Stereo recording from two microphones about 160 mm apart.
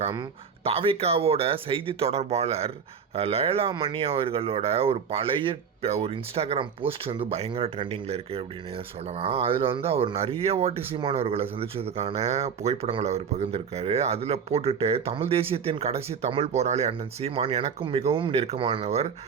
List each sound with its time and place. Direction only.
0.6 s speech: 35° right (ahead or behind)